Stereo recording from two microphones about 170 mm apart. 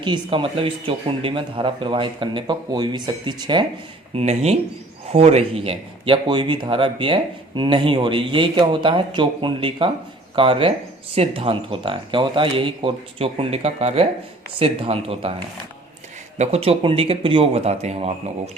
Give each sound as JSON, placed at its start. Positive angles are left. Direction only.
{"t": 0.0, "sound": "speech", "side_deg": -30}
{"t": 4.1, "sound": "speech", "side_deg": -40}
{"t": 16.4, "sound": "speech", "side_deg": -35}